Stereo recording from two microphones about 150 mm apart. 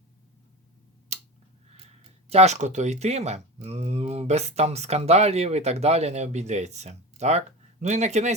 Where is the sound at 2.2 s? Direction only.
45° right (ahead or behind).